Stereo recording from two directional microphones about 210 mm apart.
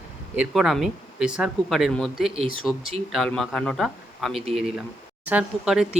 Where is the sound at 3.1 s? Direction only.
Centre (ahead or behind).